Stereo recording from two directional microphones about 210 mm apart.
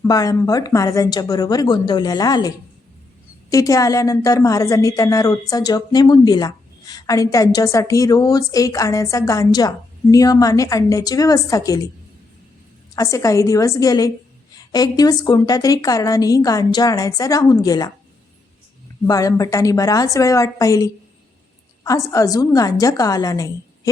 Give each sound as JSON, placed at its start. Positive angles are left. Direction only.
{"t": 0.0, "sound": "a woman's voice", "side_deg": 15}
{"t": 3.5, "sound": "a woman's voice", "side_deg": 15}
{"t": 13.0, "sound": "a woman's voice", "side_deg": 15}
{"t": 19.0, "sound": "a woman's voice", "side_deg": 15}